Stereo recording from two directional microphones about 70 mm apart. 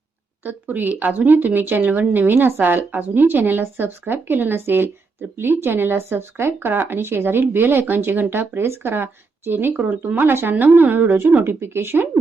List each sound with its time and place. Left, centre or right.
0.4 s a woman's voice: right